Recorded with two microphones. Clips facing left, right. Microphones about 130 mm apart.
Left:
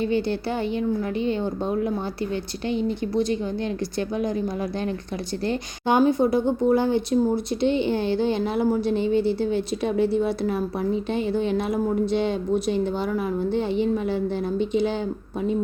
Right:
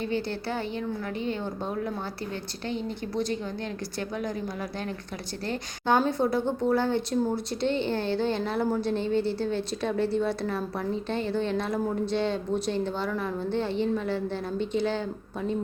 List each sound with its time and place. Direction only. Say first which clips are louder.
0.0 s speech: left 6 dB; 15° left (ahead or behind)
2.6 s speech: left 7 dB; 15° left (ahead or behind)
5.5 s speech: left 2 dB; 15° left (ahead or behind)